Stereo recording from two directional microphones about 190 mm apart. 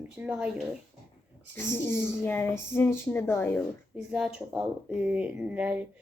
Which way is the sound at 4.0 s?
5° right (ahead or behind).